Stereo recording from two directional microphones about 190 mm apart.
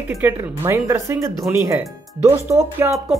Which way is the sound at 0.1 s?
15° right (ahead or behind).